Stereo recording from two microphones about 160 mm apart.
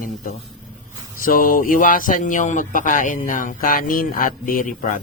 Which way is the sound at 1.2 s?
60° left (ahead or behind).